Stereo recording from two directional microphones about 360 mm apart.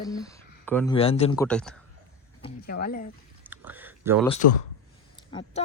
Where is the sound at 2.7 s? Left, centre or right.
Left.